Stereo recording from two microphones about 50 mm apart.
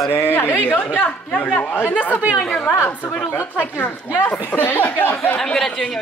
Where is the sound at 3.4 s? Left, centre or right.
Left.